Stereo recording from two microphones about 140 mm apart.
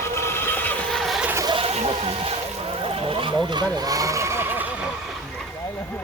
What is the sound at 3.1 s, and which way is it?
Vehicle, 35° right (ahead or behind).